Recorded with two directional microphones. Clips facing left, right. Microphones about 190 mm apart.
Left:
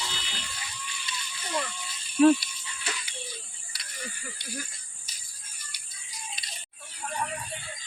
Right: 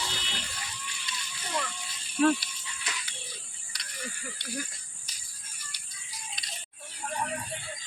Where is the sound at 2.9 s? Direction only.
30° left (ahead or behind).